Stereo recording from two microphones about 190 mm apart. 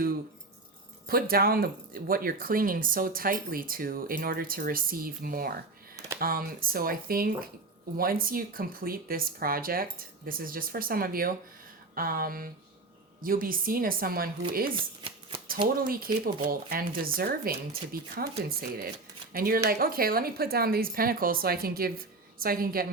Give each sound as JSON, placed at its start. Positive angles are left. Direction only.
{"t": 1.0, "sound": "speech", "side_deg": -50}
{"t": 14.8, "sound": "shuffling cards", "side_deg": -25}
{"t": 15.9, "sound": "speech", "side_deg": -50}